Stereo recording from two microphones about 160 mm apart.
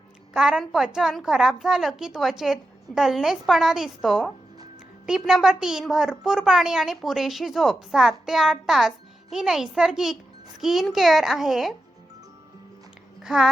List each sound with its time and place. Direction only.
0.3 s a woman's voice: 5° right (ahead or behind)
13.2 s a woman's voice: 5° right (ahead or behind)